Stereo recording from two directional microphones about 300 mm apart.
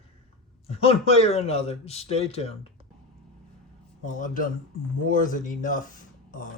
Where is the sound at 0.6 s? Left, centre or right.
Centre.